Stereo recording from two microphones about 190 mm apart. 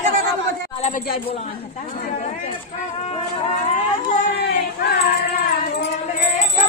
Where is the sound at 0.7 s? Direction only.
30° left (ahead or behind).